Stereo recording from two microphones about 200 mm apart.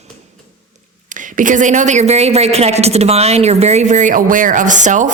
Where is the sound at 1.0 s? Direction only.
40° right (ahead or behind).